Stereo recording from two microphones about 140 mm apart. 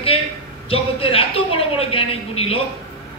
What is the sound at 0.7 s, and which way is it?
A man's voice, 40° left (ahead or behind).